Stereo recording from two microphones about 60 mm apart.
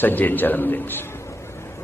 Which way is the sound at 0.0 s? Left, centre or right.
Left.